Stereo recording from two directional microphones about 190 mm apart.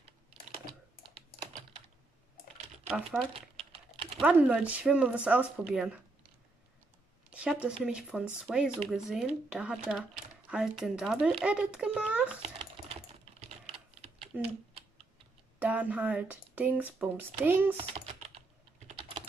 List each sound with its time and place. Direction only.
2.9 s speech: 5° right (ahead or behind)
7.2 s speech: 5° right (ahead or behind)
12.4 s typing: 30° right (ahead or behind)
14.3 s speech: 10° right (ahead or behind)
15.6 s speech: 10° right (ahead or behind)
18.9 s typing: 25° right (ahead or behind)